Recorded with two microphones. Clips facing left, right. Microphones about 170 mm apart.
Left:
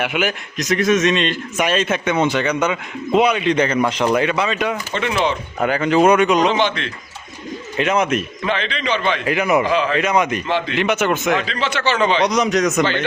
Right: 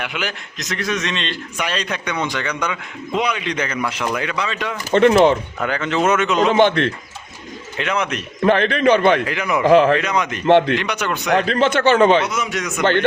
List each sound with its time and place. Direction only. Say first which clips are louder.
0.0 s a man's voice: left 6 dB; 20° left (ahead or behind)
4.9 s a man's voice: right 10 dB; 50° right (ahead or behind)
5.6 s speech: left 5 dB; 15° left (ahead or behind)
6.6 s a man's voice: right 6 dB; 55° right (ahead or behind)
7.8 s a man's voice: left 4 dB; 20° left (ahead or behind)
8.4 s a man's voice: right 9 dB; 55° right (ahead or behind)
9.2 s a man's voice: left 4 dB; 20° left (ahead or behind)
9.6 s speech: right 6 dB; 60° right (ahead or behind)
10.0 s a man's voice: left 4 dB; 20° left (ahead or behind)
10.4 s speech: right 8 dB; 60° right (ahead or behind)
10.8 s a man's voice: left 5 dB; 20° left (ahead or behind)
11.3 s a man's voice: right 6 dB; 50° right (ahead or behind)
12.2 s speech: left 7 dB; 40° left (ahead or behind)
12.8 s speech: right 3 dB; 55° right (ahead or behind)